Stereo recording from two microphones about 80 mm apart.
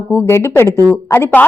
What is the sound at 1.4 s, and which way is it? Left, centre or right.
Speech, centre.